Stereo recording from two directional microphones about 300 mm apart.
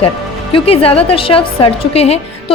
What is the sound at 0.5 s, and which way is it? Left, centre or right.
A woman's voice, centre.